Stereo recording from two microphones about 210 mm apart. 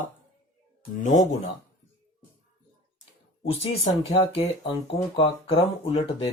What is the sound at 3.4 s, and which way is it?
Speech, 30° left (ahead or behind).